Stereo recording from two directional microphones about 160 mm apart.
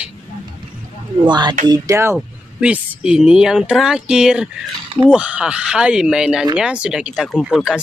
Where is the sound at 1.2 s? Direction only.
30° right (ahead or behind).